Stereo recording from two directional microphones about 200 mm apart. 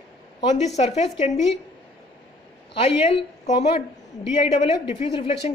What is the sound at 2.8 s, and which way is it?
Speech, 30° left (ahead or behind).